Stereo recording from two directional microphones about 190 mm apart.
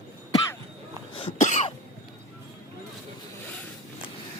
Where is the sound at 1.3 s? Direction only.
40° left (ahead or behind).